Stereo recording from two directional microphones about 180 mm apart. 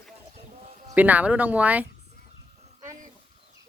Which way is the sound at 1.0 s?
10° right (ahead or behind).